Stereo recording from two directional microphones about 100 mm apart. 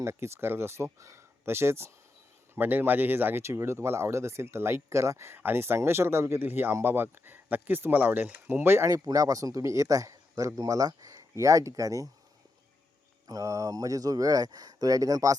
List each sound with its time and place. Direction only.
0.0 s speech: 25° right (ahead or behind)
8.9 s a man's voice: 35° right (ahead or behind)
13.2 s a man's voice: 35° right (ahead or behind)